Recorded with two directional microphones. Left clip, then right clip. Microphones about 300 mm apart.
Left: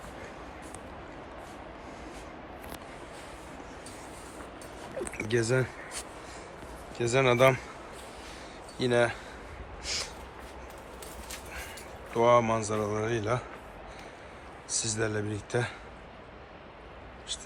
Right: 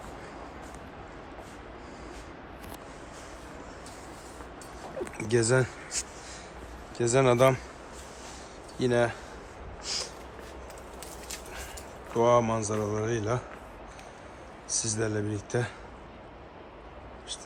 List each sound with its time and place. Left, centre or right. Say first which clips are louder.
5.0 s a sound: left 1 dB; right
5.3 s speech: right 3 dB; centre
7.0 s speech: right 1 dB; centre
8.8 s speech: even; centre
9.8 s snort: even; centre
12.1 s speech: even; centre
14.7 s speech: right 1 dB; centre